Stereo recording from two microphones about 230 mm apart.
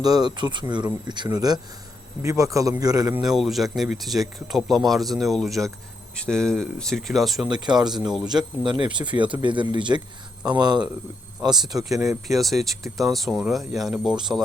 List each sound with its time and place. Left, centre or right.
0.0 s speech: centre
3.2 s speech: centre
7.5 s speech: centre
7.9 s speech: centre
8.3 s speech: centre
12.4 s speech: centre